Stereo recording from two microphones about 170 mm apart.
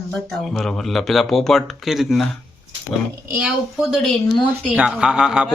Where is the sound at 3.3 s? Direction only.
5° right (ahead or behind).